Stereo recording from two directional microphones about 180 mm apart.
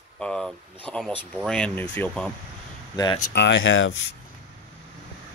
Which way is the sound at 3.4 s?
85° left.